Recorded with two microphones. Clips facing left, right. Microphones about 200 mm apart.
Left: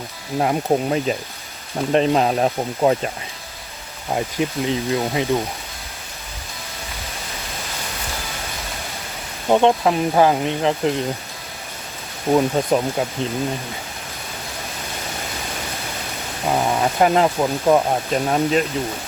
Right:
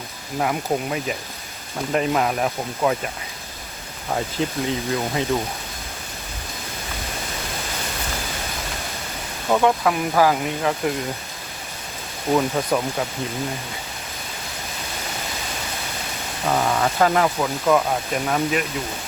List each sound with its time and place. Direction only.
0.3 s speech: 30° left (ahead or behind)
4.1 s speech: 15° left (ahead or behind)
9.5 s speech: 25° left (ahead or behind)
12.3 s speech: 25° left (ahead or behind)
16.5 s speech: 15° left (ahead or behind)